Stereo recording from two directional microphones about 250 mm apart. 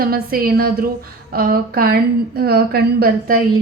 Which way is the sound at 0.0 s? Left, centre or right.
Right.